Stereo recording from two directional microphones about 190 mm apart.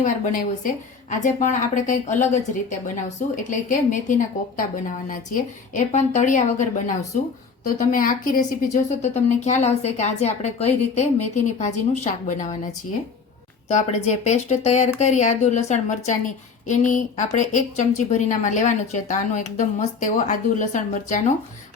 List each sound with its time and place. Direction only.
0.0 s a woman's voice: 45° left (ahead or behind)
13.7 s a woman's voice: 40° left (ahead or behind)